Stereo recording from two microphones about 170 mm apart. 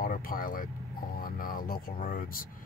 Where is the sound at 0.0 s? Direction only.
55° left (ahead or behind).